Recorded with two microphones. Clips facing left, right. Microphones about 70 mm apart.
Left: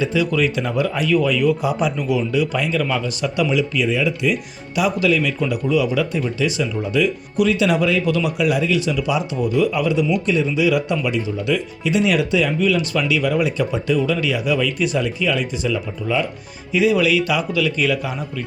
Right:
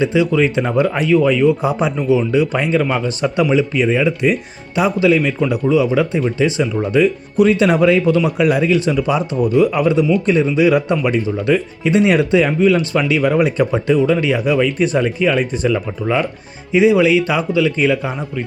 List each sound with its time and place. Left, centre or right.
0.0 s speech: right
8.4 s speech: right
16.7 s speech: right